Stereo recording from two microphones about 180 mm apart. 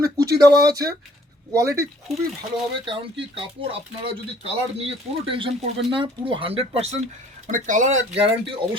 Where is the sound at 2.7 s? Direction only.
30° right (ahead or behind); by 7.9 s 45° right (ahead or behind).